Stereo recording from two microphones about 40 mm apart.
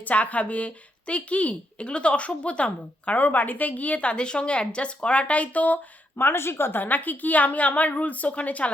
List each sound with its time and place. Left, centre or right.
0.0 s a woman's voice: left
3.2 s a woman's voice: left
6.1 s speech: left
6.8 s a woman's voice: left